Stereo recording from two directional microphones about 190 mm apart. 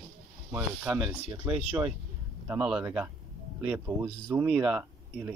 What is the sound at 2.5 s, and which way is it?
Speech, 5° right (ahead or behind).